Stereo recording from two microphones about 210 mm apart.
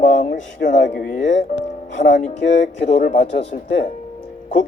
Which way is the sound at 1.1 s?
35° left (ahead or behind).